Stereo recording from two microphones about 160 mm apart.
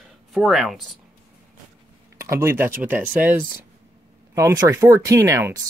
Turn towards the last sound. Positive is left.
turn(degrees=-20)  # may be behind; listen again after turning